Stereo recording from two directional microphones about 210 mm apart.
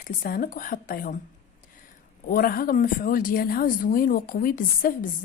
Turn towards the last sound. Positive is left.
turn(degrees=45)  # may be behind; listen again after turning